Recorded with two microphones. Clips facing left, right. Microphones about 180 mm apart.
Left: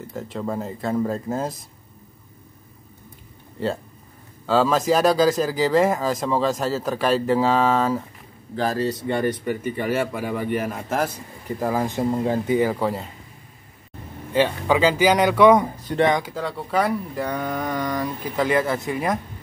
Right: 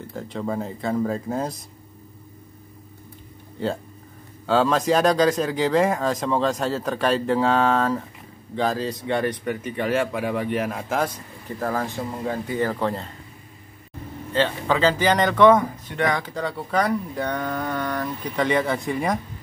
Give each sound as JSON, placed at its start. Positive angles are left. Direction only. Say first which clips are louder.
{"t": 0.0, "sound": "speech", "louder": "even", "side_deg": 0}
{"t": 3.5, "sound": "speech", "louder": "left 1 dB", "side_deg": 0}
{"t": 11.4, "sound": "speech", "louder": "left 3 dB", "side_deg": 15}
{"t": 12.0, "sound": "speech", "louder": "left 6 dB", "side_deg": 25}
{"t": 12.5, "sound": "speech", "louder": "left 3 dB", "side_deg": 10}
{"t": 14.3, "sound": "speech", "louder": "left 2 dB", "side_deg": 10}
{"t": 15.8, "sound": "speech", "louder": "left 5 dB", "side_deg": 35}
{"t": 16.1, "sound": "speech", "louder": "left 2 dB", "side_deg": 10}